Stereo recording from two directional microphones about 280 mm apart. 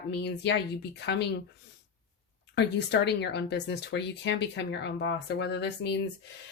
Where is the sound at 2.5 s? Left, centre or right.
Left.